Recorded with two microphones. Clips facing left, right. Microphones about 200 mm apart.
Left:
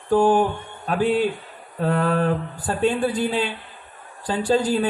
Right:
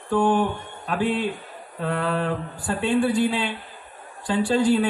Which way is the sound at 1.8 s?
45° left (ahead or behind).